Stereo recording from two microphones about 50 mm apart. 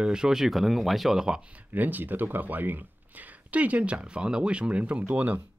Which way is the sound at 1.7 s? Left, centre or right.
Right.